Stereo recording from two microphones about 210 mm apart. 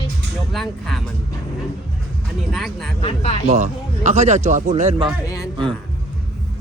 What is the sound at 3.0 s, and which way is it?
Speech, 30° left (ahead or behind).